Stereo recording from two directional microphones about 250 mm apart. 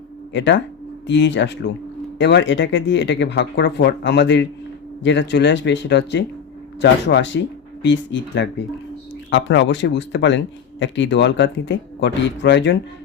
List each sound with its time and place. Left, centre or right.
0.3 s speech: left